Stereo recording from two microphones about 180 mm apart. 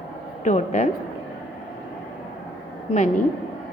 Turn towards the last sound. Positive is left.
turn(degrees=45)  # may be behind; listen again after turning